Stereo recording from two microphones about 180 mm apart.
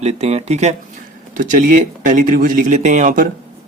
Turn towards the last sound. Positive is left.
turn(degrees=-45)  # may be behind; listen again after turning